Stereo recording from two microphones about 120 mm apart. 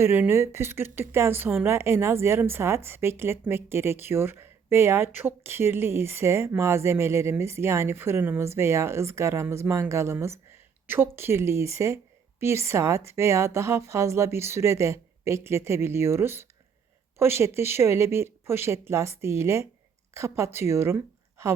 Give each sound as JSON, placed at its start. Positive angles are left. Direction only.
{"t": 0.0, "sound": "a woman's voice", "side_deg": -20}